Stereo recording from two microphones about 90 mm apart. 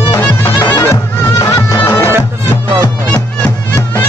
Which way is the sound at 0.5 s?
50° left (ahead or behind).